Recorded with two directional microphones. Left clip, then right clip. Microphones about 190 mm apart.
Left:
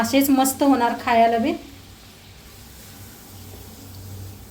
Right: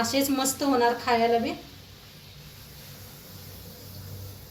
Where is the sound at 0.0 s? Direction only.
55° left (ahead or behind).